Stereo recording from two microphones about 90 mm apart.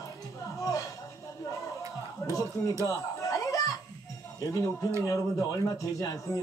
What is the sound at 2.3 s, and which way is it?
Speech, 40° left (ahead or behind).